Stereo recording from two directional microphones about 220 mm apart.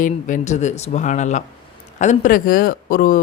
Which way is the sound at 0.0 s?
35° left (ahead or behind).